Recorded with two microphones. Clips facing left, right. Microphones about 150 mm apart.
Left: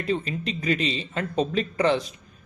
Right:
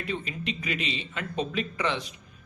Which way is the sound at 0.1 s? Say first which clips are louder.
Left 7 dB; 35° left (ahead or behind).